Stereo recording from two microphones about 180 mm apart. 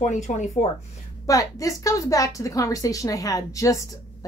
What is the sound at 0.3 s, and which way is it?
Speech, 45° left (ahead or behind).